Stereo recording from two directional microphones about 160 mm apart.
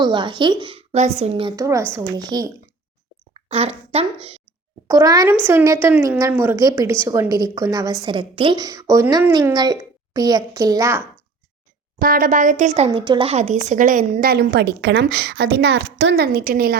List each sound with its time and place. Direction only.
0.0 s a woman's voice: 30° right (ahead or behind)
1.5 s a woman's voice: 20° right (ahead or behind)
3.3 s speech: 40° right (ahead or behind)
4.9 s a woman's voice: 20° right (ahead or behind)
11.9 s speech: 65° right (ahead or behind); by 12.9 s 45° right (ahead or behind)
12.9 s a woman's voice: 30° right (ahead or behind)
13.3 s speech: 45° right (ahead or behind)
13.7 s a woman's voice: 55° right (ahead or behind)